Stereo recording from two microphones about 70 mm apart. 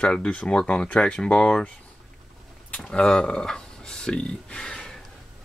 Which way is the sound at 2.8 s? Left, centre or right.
Centre.